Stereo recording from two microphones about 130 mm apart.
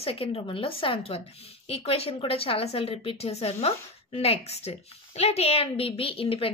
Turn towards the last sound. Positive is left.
turn(degrees=45)  # may be behind; listen again after turning